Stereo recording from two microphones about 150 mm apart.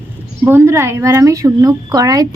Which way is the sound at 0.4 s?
15° right (ahead or behind).